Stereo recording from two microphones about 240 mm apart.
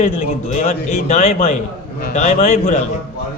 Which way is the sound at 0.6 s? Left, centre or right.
Left.